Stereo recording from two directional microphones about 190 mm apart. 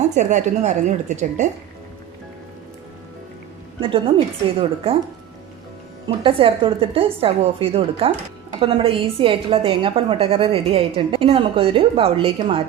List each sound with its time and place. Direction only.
0.1 s speech: 40° right (ahead or behind)
3.8 s a woman's voice: 25° right (ahead or behind)
6.1 s a woman's voice: 30° right (ahead or behind)